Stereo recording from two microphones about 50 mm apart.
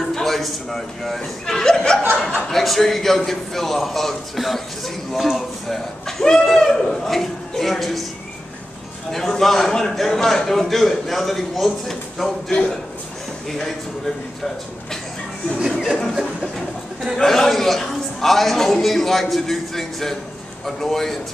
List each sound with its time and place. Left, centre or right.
0.1 s a man's voice: centre
9.3 s a man's voice: centre
12.4 s speech: centre
13.5 s a man's voice: centre
15.7 s speech: centre
17.2 s a man's voice: centre